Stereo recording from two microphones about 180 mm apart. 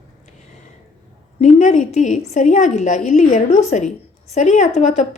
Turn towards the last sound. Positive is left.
turn(degrees=40)  # may be behind; listen again after turning